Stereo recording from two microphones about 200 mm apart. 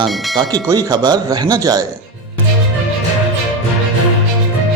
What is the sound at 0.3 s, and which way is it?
Speech, 20° right (ahead or behind).